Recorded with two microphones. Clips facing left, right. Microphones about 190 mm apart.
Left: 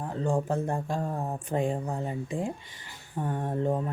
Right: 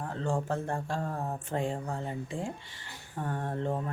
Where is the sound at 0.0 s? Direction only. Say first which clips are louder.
Left 4 dB; 15° left (ahead or behind).